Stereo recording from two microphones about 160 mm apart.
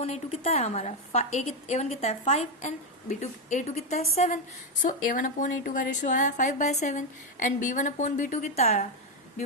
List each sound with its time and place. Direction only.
0.0 s a woman's voice: 40° left (ahead or behind)
4.8 s a woman's voice: 55° left (ahead or behind); by 8.9 s 40° left (ahead or behind)